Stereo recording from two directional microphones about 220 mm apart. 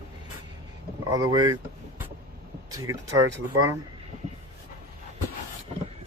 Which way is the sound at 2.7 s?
15° right (ahead or behind).